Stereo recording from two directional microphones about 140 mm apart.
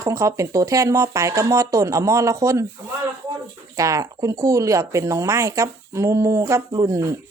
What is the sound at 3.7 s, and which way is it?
Speech, 25° right (ahead or behind).